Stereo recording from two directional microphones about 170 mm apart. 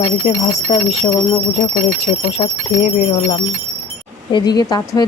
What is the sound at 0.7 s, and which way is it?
Speech, 40° left (ahead or behind).